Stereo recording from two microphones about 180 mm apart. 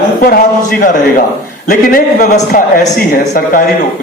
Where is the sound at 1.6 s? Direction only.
50° left (ahead or behind).